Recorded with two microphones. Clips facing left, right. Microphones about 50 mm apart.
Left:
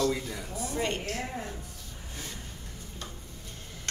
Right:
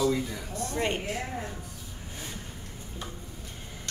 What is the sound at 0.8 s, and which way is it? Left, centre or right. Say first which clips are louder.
Speech: right 2 dB; centre.